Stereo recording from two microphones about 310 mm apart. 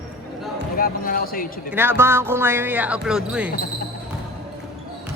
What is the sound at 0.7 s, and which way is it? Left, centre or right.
Speech, left.